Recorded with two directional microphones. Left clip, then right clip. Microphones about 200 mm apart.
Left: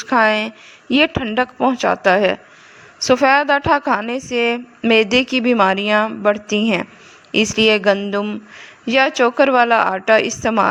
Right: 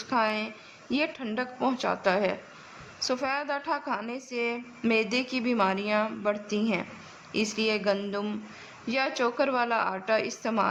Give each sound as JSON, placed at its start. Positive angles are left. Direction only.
{"t": 0.0, "sound": "a woman's voice", "side_deg": 40}